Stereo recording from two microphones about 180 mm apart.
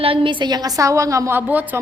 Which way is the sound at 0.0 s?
30° right (ahead or behind).